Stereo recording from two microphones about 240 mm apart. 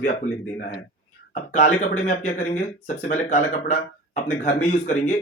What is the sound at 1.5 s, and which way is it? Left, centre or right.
Speech, left.